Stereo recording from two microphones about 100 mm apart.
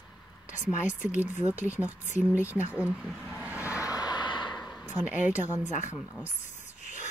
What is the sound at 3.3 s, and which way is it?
Vehicle, 15° right (ahead or behind).